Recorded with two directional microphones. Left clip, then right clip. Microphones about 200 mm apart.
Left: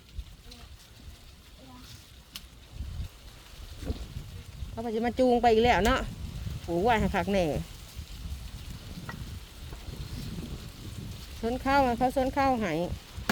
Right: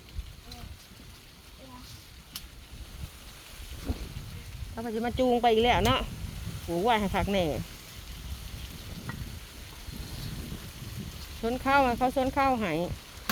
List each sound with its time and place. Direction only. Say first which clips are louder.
4.7 s speech: left 2 dB; 30° left (ahead or behind)
11.4 s speech: right 1 dB; 20° left (ahead or behind)